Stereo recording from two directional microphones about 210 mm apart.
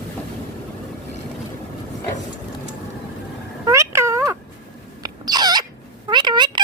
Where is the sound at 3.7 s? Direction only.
15° right (ahead or behind).